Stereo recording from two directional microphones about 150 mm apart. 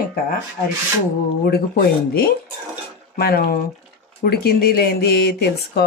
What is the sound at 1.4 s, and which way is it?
Speech, 85° left.